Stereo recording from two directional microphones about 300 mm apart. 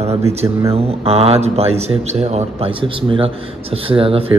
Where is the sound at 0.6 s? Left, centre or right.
Centre.